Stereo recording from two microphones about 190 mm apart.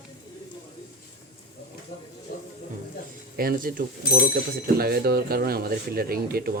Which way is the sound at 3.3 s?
50° right (ahead or behind).